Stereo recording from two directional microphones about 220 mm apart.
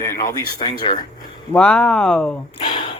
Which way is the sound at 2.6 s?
20° left (ahead or behind).